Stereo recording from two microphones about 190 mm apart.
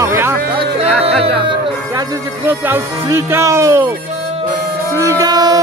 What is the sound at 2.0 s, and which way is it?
Speech, 10° right (ahead or behind).